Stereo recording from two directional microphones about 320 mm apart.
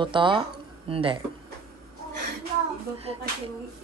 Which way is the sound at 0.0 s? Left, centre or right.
Centre.